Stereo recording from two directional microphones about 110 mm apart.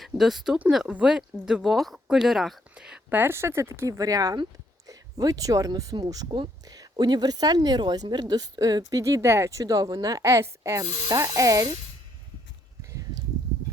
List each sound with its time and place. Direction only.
0.0 s speech: centre (ahead or behind)
3.2 s a woman's voice: 20° right (ahead or behind)
12.9 s a sound: 30° right (ahead or behind)